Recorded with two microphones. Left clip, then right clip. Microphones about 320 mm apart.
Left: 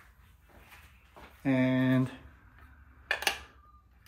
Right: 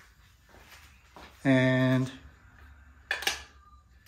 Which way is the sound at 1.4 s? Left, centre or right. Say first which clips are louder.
Right 4 dB; right.